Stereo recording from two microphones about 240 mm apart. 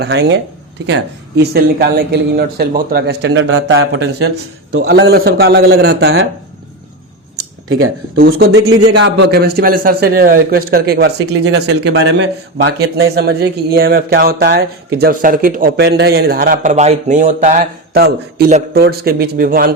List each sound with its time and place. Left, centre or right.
0.0 s speech: right
8.1 s speech: right
8.8 s a man's voice: right
9.1 s speech: right